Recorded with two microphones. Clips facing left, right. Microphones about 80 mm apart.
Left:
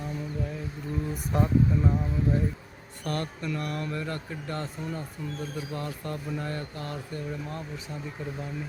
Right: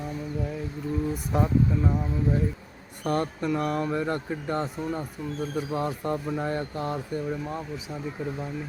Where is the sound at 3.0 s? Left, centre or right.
Centre.